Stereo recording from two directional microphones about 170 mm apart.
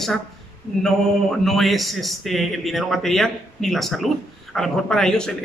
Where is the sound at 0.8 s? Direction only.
Centre (ahead or behind).